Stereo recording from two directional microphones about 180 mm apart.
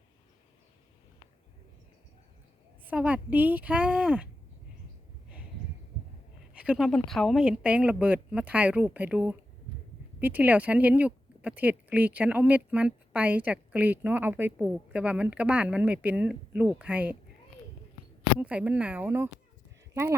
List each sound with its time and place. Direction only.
2.8 s speech: 10° right (ahead or behind)
6.5 s speech: 5° right (ahead or behind)
18.3 s speech: 5° right (ahead or behind)